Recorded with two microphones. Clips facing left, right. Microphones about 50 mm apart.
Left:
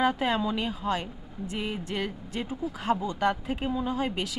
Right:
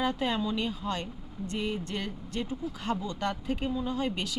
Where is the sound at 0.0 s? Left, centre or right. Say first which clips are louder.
Left 4 dB; centre.